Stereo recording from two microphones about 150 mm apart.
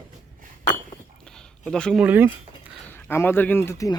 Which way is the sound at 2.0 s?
10° right (ahead or behind).